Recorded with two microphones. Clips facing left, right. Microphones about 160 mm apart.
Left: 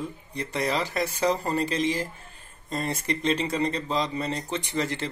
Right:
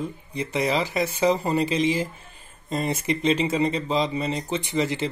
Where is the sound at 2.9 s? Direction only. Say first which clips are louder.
Right 4 dB; 5° right (ahead or behind).